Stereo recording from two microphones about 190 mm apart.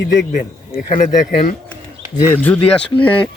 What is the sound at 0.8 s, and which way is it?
Speech, 40° left (ahead or behind).